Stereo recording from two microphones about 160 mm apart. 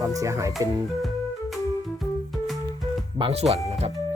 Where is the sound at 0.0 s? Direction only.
20° right (ahead or behind).